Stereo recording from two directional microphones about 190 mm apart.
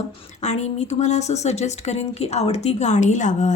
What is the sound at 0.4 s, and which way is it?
Speech, 35° left (ahead or behind).